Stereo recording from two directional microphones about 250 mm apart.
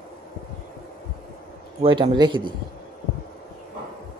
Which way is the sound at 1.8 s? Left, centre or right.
Centre.